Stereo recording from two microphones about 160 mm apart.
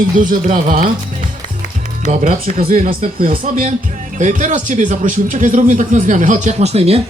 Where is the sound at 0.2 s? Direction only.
55° right (ahead or behind).